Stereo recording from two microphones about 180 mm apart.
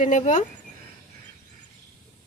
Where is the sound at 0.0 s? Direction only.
45° left (ahead or behind).